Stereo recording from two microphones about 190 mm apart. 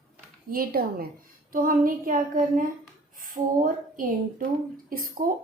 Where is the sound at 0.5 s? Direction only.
50° right (ahead or behind).